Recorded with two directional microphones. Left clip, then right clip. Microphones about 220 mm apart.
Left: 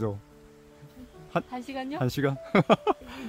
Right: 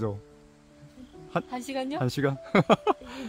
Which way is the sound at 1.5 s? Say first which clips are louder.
Right 3 dB; 50° right (ahead or behind).